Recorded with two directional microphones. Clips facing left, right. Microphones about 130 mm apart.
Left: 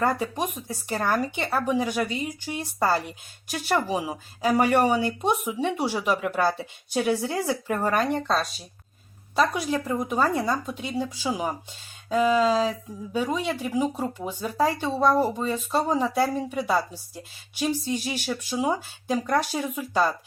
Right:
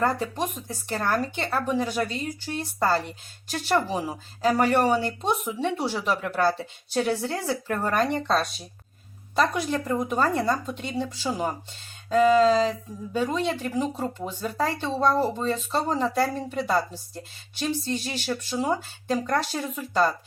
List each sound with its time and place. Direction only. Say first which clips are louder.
0.0 s a woman's voice: even; 10° left (ahead or behind)